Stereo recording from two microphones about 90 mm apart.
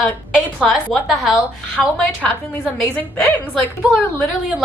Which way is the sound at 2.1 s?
15° left (ahead or behind).